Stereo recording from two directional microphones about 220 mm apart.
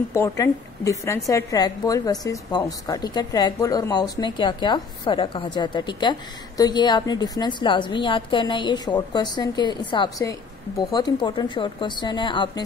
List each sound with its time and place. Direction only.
0.1 s a woman's voice: 15° left (ahead or behind)